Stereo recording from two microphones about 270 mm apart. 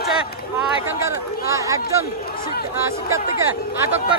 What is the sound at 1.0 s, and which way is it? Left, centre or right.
Speech, centre.